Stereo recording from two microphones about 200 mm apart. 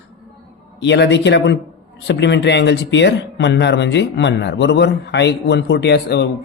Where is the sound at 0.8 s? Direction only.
60° left (ahead or behind).